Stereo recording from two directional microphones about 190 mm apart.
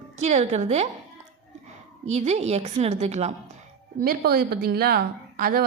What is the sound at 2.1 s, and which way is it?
A woman's voice, 35° right (ahead or behind).